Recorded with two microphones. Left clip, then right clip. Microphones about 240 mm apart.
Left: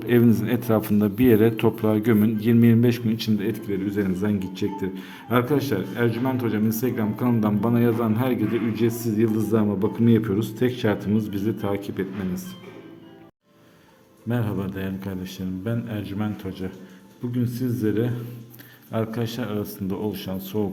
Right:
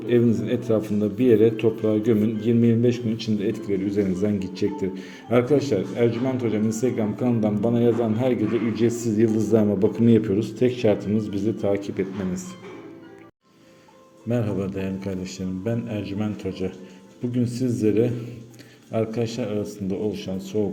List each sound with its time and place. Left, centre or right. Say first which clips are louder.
0.0 s speech: left 1 dB; left; by 12.5 s centre
14.3 s speech: right 3 dB; centre